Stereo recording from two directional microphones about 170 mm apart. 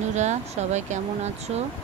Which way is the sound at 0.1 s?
40° right (ahead or behind).